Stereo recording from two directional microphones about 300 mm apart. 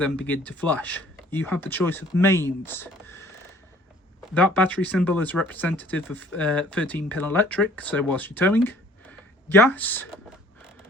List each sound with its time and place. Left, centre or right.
0.0 s speech: centre
4.4 s speech: centre